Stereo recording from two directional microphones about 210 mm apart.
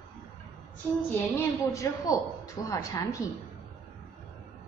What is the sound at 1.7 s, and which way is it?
A woman's voice, 15° left (ahead or behind).